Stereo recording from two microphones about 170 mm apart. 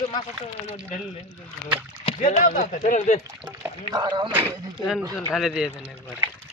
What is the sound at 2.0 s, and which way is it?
Speech, 40° left (ahead or behind).